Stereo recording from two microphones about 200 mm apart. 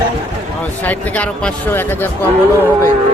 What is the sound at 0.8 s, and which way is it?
Speech, 10° left (ahead or behind).